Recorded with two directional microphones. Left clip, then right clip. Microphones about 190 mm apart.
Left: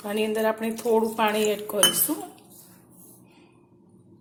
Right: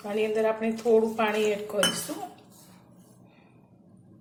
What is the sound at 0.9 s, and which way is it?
Cutlery, 45° left (ahead or behind).